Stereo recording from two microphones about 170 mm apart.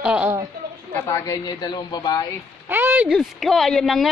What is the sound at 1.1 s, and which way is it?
Speech, 20° left (ahead or behind).